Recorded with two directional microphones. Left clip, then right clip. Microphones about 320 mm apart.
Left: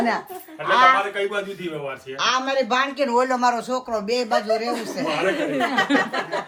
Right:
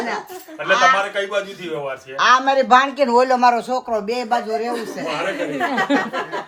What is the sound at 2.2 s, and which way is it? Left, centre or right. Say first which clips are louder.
A man's voice: right 7 dB; right.